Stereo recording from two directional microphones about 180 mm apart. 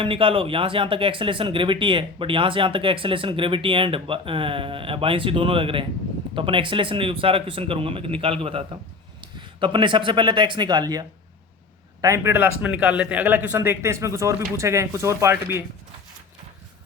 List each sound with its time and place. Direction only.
0.0 s speech: 30° right (ahead or behind)
12.0 s speech: 15° right (ahead or behind)